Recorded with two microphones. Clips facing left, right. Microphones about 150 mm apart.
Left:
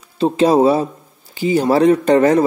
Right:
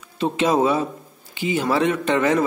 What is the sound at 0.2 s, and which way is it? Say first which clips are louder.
Speech: left 6 dB; 35° left (ahead or behind).